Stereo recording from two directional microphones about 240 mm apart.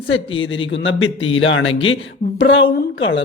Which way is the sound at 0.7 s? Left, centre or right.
Left.